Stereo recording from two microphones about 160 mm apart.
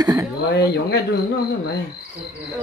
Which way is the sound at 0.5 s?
90° left.